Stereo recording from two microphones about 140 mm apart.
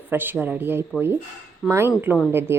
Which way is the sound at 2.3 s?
15° right (ahead or behind).